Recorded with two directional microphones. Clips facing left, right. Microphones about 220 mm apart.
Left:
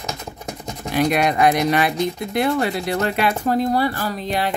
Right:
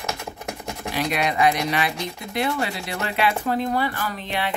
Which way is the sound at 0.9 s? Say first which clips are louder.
Left 6 dB; 45° left (ahead or behind).